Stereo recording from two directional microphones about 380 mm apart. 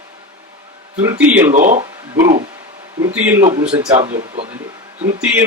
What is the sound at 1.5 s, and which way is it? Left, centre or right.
Speech, centre.